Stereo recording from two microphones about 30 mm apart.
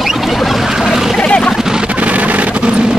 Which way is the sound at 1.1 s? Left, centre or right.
Left.